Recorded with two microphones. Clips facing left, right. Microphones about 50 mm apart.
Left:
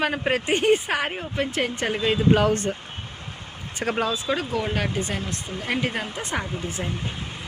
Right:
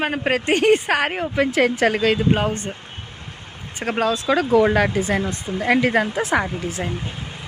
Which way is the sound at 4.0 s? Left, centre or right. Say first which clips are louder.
Right 8 dB; right.